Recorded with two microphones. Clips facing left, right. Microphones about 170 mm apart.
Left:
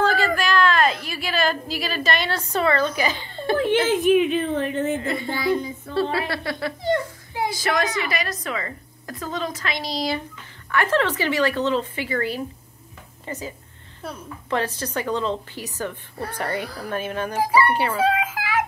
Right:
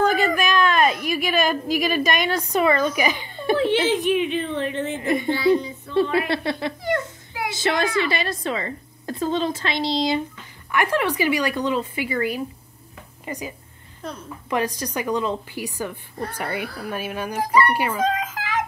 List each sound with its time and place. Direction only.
0.0 s a sound: 20° right (ahead or behind)
3.5 s a woman's voice: 50° left (ahead or behind)
5.0 s a woman's voice: 20° right (ahead or behind)
6.8 s a sound: 20° left (ahead or behind)
7.5 s a woman's voice: 25° right (ahead or behind)
14.0 s speech: 5° left (ahead or behind)
14.5 s a woman's voice: 10° right (ahead or behind)
17.4 s speech: 10° left (ahead or behind)
17.9 s a sound: 10° left (ahead or behind)